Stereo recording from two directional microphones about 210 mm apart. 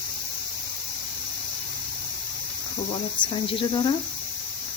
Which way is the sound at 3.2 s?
20° left (ahead or behind).